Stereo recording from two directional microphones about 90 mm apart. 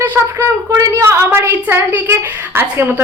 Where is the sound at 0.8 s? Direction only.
35° right (ahead or behind).